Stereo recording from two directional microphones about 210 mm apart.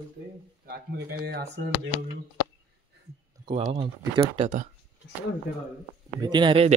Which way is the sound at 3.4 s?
30° right (ahead or behind).